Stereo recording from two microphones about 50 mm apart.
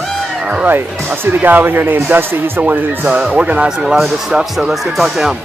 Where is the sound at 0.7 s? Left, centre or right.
Right.